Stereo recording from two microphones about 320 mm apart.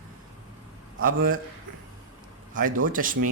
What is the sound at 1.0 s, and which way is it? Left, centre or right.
Speech, right.